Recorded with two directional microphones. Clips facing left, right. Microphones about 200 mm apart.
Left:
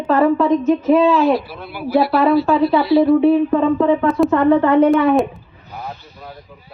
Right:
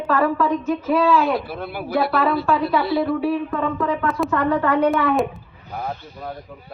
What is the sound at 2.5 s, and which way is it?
Speech, 30° left (ahead or behind).